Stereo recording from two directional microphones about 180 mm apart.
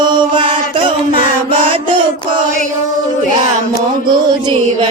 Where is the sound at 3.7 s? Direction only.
25° right (ahead or behind).